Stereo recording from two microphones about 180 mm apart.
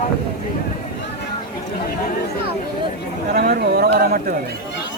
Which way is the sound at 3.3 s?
60° right (ahead or behind).